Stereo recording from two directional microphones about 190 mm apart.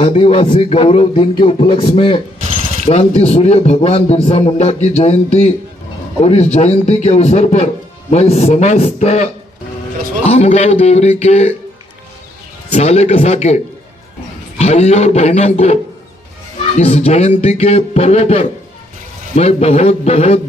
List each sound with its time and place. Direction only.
0.0 s a man's voice: 30° left (ahead or behind)
12.7 s a man's voice: 35° left (ahead or behind)
14.6 s a man's voice: 35° left (ahead or behind)